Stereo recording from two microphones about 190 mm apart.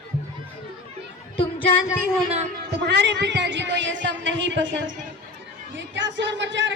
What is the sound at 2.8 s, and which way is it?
Speech, 65° right (ahead or behind).